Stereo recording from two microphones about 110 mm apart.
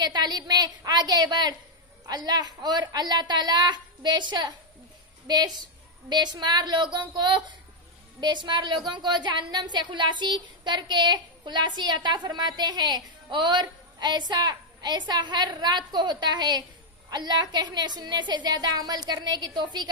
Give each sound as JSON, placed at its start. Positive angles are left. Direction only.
{"t": 0.0, "sound": "a woman's voice", "side_deg": -40}